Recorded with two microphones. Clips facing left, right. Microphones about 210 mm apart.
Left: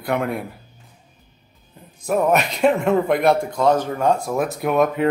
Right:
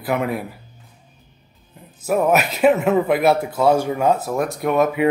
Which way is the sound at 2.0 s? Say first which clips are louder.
Right 1 dB; 5° right (ahead or behind).